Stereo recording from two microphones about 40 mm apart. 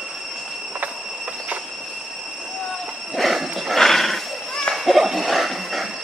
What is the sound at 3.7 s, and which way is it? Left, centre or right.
Horse, centre.